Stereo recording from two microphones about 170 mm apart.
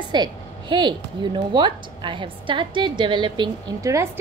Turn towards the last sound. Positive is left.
turn(degrees=-20)  # may be behind; listen again after turning